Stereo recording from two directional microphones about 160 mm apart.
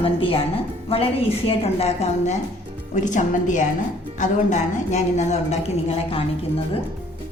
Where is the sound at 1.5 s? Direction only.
40° left (ahead or behind).